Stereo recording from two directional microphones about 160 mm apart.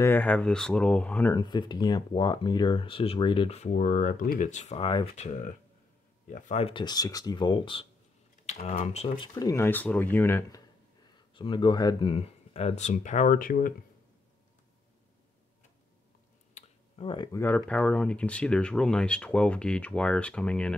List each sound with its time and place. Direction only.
0.0 s speech: 10° left (ahead or behind)
1.3 s speech: 25° left (ahead or behind); by 4.7 s 50° left (ahead or behind)
4.7 s speech: 35° left (ahead or behind)
5.2 s speech: 50° left (ahead or behind)
6.7 s speech: 25° left (ahead or behind)
8.5 s speech: 45° left (ahead or behind)
9.3 s speech: 20° left (ahead or behind)
11.3 s speech: 30° left (ahead or behind); by 13.7 s 60° left (ahead or behind)
16.5 s a sound: 40° left (ahead or behind)
17.3 s speech: 15° left (ahead or behind)